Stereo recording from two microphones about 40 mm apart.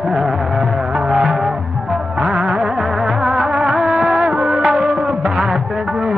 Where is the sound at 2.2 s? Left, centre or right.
Right.